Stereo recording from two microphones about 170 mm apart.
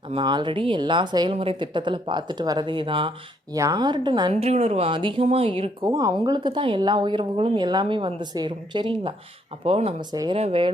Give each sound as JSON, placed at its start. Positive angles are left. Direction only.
{"t": 0.1, "sound": "speech", "side_deg": -25}
{"t": 10.1, "sound": "speech", "side_deg": -25}